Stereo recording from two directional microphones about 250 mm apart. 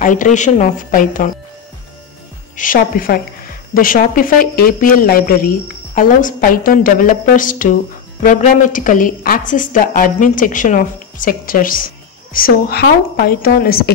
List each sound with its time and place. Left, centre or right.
0.0 s a woman's voice: left
2.5 s a woman's voice: left